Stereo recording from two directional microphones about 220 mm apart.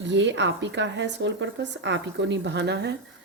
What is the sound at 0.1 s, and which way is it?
Speech, 55° right (ahead or behind).